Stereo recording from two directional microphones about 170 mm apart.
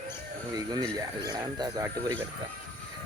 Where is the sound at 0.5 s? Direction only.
20° right (ahead or behind).